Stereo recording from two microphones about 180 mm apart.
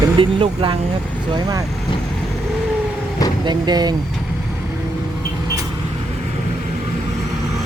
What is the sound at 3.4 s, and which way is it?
Speech, 25° right (ahead or behind).